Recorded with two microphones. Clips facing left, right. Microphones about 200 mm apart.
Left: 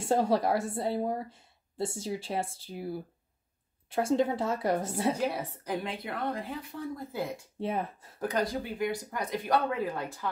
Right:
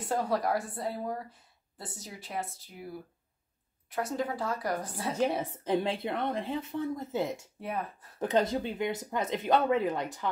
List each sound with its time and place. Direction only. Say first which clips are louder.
0.0 s a woman's voice: left 4 dB; 25° left (ahead or behind)
5.5 s speech: right 5 dB; 25° right (ahead or behind)
7.6 s a woman's voice: left 4 dB; 25° left (ahead or behind)
8.2 s speech: right 3 dB; 25° right (ahead or behind)